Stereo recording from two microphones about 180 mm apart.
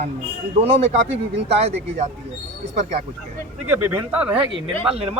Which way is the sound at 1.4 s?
35° right (ahead or behind).